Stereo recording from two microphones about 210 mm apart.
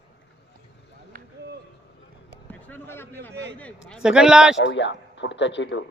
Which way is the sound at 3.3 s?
55° right (ahead or behind).